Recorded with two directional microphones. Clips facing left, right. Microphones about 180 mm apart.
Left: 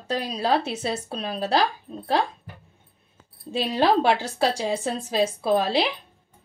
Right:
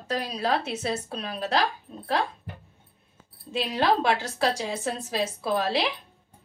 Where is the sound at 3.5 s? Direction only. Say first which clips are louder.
Left 3 dB; 30° left (ahead or behind).